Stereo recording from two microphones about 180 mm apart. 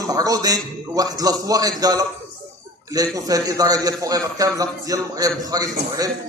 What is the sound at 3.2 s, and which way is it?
A man's voice, 20° right (ahead or behind).